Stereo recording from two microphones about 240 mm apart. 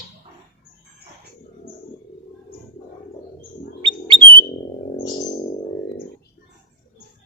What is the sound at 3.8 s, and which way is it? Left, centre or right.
Bird, centre.